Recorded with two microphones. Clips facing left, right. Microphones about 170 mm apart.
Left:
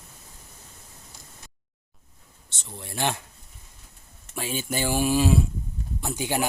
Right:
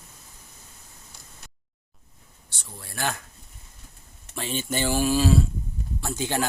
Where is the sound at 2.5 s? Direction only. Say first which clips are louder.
Left 4 dB; 20° left (ahead or behind).